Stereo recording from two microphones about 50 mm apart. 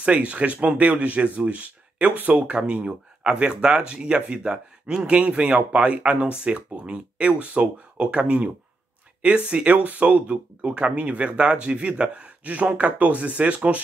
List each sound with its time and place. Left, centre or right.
0.0 s speech: right